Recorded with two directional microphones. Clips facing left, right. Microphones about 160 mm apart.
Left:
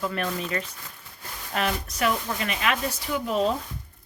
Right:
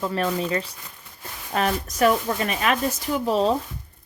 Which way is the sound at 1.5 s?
40° right (ahead or behind).